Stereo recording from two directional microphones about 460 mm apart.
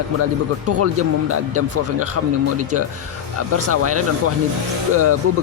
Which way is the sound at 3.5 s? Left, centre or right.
Right.